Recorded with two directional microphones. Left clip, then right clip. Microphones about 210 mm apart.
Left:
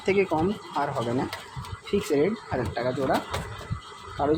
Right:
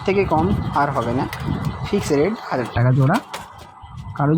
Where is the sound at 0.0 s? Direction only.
10° right (ahead or behind).